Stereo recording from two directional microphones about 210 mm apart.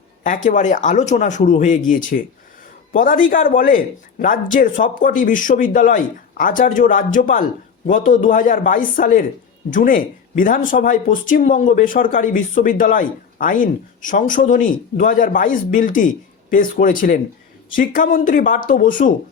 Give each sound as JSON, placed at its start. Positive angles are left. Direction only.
{"t": 0.2, "sound": "speech", "side_deg": 40}